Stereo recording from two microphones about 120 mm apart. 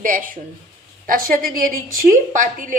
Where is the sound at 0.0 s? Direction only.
90° right.